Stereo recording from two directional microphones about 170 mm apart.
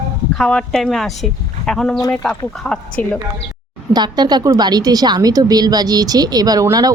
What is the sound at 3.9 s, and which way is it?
A woman's voice, 25° right (ahead or behind).